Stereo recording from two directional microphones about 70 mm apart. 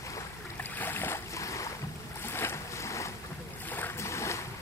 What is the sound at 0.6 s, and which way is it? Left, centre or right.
Boat, left.